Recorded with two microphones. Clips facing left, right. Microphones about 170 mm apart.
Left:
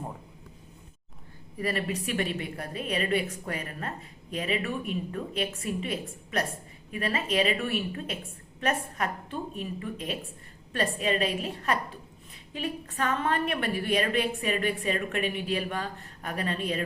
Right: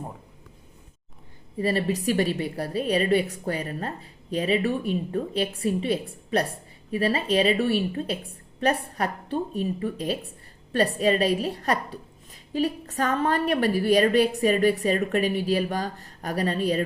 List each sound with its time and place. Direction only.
1.5 s a woman's voice: 30° right (ahead or behind)